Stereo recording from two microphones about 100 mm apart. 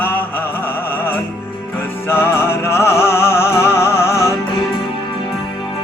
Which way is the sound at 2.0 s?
25° left (ahead or behind).